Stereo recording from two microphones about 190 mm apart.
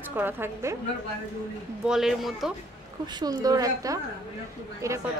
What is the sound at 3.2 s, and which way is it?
A woman's voice, 20° right (ahead or behind).